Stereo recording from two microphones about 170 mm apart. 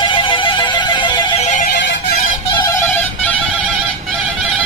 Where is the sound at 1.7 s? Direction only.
75° left (ahead or behind).